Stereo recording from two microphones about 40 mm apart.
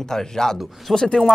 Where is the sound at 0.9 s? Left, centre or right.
Centre.